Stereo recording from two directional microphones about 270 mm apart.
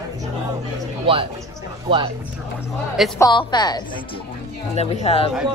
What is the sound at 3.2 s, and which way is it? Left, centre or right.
A woman's voice, centre.